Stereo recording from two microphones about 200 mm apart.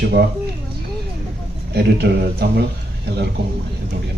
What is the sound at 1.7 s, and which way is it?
Speech, 55° right (ahead or behind).